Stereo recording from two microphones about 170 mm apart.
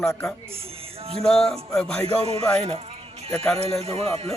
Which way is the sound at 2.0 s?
35° right (ahead or behind).